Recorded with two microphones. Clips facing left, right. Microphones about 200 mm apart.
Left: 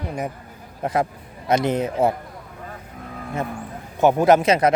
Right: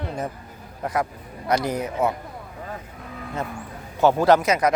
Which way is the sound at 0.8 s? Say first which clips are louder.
Left 3 dB; 25° left (ahead or behind).